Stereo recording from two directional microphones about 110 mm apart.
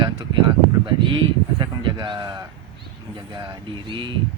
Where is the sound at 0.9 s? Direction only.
45° right (ahead or behind).